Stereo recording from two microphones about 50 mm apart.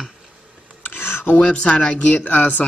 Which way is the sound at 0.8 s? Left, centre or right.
Left.